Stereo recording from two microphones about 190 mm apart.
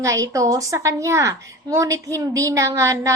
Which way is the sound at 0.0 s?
15° right (ahead or behind).